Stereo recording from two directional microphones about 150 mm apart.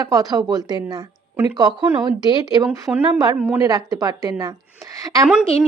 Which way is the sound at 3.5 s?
20° right (ahead or behind).